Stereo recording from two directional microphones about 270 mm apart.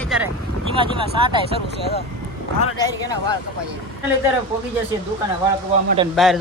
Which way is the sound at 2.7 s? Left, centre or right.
Centre.